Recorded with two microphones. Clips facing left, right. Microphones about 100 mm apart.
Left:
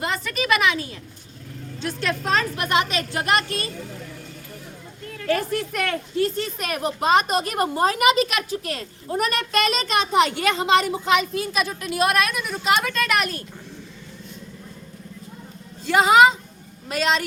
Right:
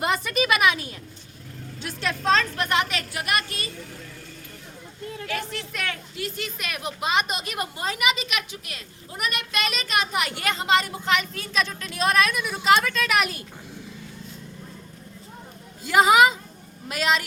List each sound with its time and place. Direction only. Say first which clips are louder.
0.0 s a woman's voice: right 2 dB; 20° right (ahead or behind)
1.8 s a woman's voice: left 4 dB; centre (ahead or behind)
2.3 s a child's voice: left 1 dB; 15° left (ahead or behind); by 3.7 s 35° left (ahead or behind)
5.2 s a woman's voice: left 10 dB; 40° left (ahead or behind)
6.1 s a woman's voice: left 9 dB; 35° left (ahead or behind); by 13.4 s 5° right (ahead or behind)
15.8 s a woman's voice: left 2 dB; 5° right (ahead or behind)